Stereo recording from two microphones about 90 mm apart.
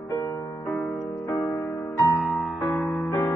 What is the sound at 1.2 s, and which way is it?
Music, 20° left (ahead or behind).